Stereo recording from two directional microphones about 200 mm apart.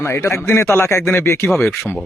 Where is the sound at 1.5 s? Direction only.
Centre (ahead or behind).